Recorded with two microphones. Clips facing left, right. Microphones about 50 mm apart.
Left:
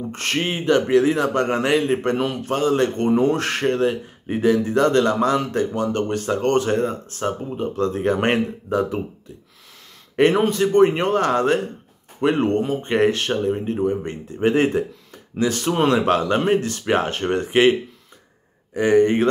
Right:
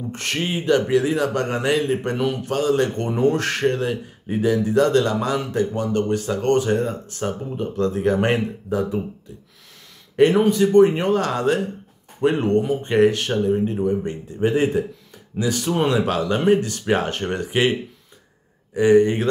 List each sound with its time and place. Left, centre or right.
0.1 s speech: left
10.1 s a man's voice: left